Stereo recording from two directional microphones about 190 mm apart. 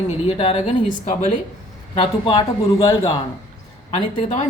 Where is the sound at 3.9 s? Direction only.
40° left (ahead or behind).